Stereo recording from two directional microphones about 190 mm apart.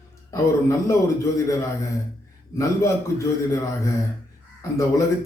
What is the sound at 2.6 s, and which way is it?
A man's voice, 15° left (ahead or behind).